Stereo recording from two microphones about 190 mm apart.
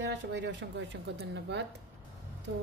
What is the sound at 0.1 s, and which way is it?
Speech, 65° right (ahead or behind).